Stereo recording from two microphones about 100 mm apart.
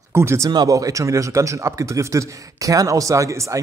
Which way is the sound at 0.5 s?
40° right (ahead or behind).